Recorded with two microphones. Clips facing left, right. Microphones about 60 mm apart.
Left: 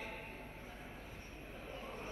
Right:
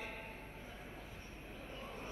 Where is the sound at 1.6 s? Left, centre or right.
Left.